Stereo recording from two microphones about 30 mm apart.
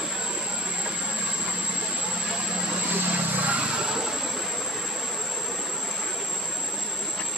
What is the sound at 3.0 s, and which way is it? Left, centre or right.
Vehicle, right.